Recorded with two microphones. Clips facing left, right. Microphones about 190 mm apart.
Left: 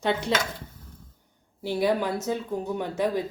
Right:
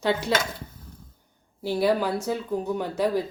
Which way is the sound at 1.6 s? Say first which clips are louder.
Right 2 dB; 15° left (ahead or behind).